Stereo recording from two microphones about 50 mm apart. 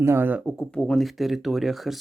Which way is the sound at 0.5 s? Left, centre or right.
Centre.